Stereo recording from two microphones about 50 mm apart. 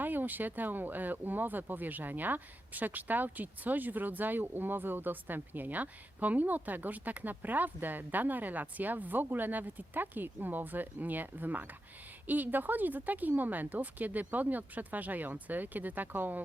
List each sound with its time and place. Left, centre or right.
0.0 s speech: right